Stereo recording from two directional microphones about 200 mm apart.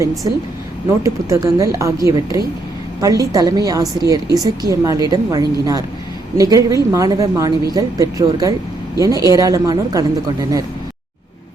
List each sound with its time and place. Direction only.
0.2 s a woman's voice: 15° right (ahead or behind)